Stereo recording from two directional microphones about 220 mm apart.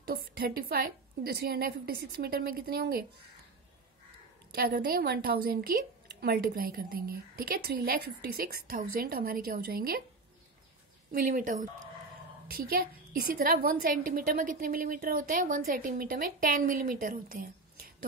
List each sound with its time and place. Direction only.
0.0 s a woman's voice: 45° right (ahead or behind)
4.6 s a woman's voice: 45° right (ahead or behind)
11.1 s a woman's voice: 40° right (ahead or behind)